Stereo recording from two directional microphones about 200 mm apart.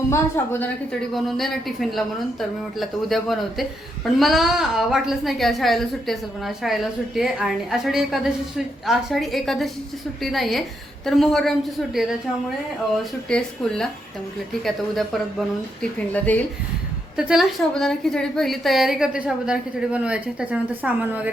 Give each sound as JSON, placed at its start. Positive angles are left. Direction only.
{"t": 0.4, "sound": "a woman's voice", "side_deg": 10}
{"t": 1.1, "sound": "speech", "side_deg": 0}
{"t": 13.2, "sound": "speech", "side_deg": 5}